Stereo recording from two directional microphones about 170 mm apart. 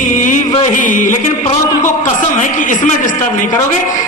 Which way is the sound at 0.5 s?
45° left (ahead or behind).